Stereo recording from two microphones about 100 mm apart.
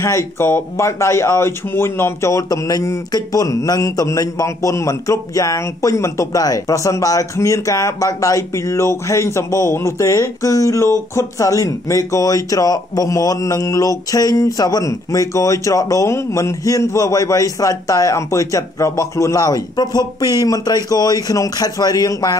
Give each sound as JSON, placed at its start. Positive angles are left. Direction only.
{"t": 0.0, "sound": "speech", "side_deg": 25}